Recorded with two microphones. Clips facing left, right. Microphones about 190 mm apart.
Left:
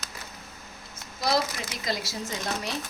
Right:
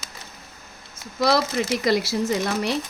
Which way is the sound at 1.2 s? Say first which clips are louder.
Right 6 dB; 75° right (ahead or behind).